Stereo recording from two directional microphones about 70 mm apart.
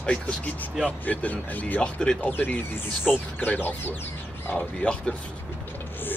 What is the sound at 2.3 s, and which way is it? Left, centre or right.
Speech, left.